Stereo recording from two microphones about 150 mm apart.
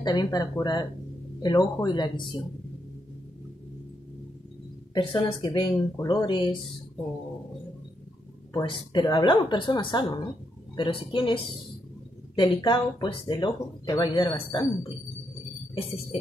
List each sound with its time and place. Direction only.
0.0 s speech: 25° left (ahead or behind)
4.9 s speech: 30° left (ahead or behind)
8.6 s speech: 35° left (ahead or behind)
15.7 s speech: 40° left (ahead or behind)